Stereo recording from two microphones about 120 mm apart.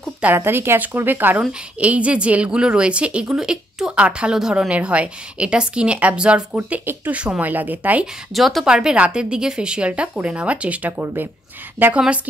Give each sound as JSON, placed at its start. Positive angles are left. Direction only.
{"t": 0.2, "sound": "a woman's voice", "side_deg": -15}
{"t": 8.3, "sound": "a woman's voice", "side_deg": 0}